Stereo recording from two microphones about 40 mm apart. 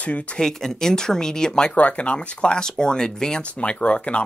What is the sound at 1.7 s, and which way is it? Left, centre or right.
Speech, left.